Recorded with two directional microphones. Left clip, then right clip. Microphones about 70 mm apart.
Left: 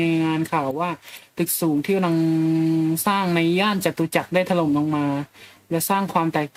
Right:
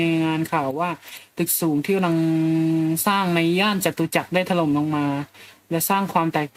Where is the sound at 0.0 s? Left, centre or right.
Centre.